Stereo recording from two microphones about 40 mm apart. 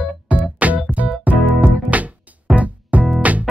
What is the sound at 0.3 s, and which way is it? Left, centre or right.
Music, right.